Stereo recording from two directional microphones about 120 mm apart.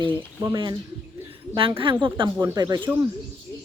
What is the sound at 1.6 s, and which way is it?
Speech, 45° right (ahead or behind).